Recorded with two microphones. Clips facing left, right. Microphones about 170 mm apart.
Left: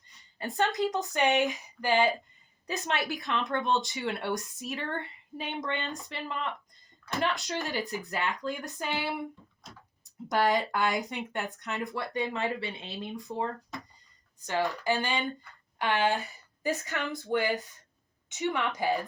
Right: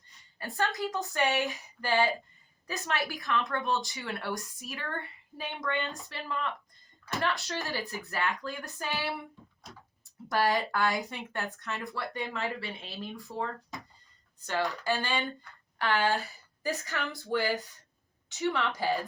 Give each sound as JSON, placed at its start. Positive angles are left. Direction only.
{"t": 0.3, "sound": "speech", "side_deg": 20}
{"t": 16.1, "sound": "speech", "side_deg": 0}
{"t": 17.1, "sound": "speech", "side_deg": 20}